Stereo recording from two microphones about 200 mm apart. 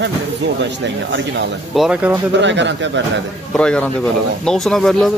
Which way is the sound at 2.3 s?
65° right (ahead or behind).